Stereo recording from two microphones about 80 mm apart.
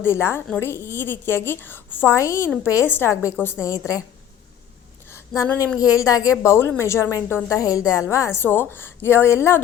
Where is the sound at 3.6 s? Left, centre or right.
Left.